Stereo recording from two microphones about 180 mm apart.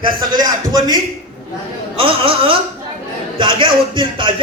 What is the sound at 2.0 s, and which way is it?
A man's voice, 30° right (ahead or behind).